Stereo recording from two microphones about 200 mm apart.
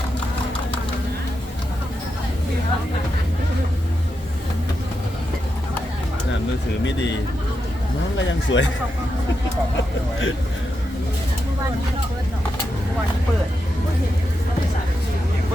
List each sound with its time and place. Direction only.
8.2 s speech: 65° left (ahead or behind)
9.7 s speech: 75° left (ahead or behind)